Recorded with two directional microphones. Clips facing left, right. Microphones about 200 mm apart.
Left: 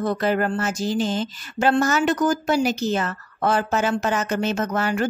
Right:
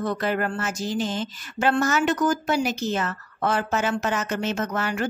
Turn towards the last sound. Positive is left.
turn(degrees=35)  # may be behind; listen again after turning